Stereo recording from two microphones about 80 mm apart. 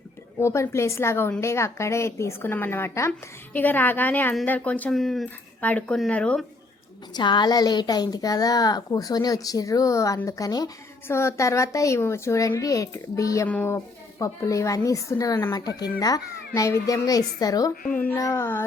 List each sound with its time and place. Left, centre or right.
0.4 s speech: left
2.5 s a woman's voice: left
3.1 s a woman's voice: left
4.9 s speech: centre
5.2 s speech: centre
7.1 s speech: left
11.1 s speech: left
18.2 s speech: left